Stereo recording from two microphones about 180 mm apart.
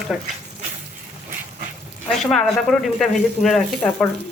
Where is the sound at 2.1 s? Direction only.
Centre (ahead or behind).